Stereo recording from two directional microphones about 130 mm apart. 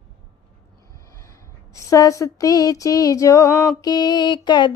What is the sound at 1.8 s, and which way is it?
Female singing, 25° left (ahead or behind).